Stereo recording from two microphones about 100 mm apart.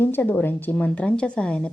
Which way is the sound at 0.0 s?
20° left (ahead or behind).